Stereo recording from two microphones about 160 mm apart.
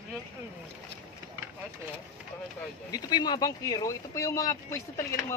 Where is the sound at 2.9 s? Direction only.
25° left (ahead or behind).